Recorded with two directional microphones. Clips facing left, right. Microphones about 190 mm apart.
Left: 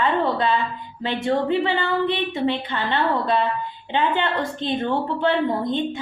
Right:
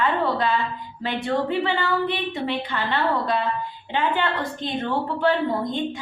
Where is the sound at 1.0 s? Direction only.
20° left (ahead or behind).